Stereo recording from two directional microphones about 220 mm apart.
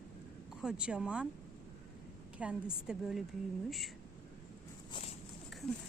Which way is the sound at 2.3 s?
5° right (ahead or behind).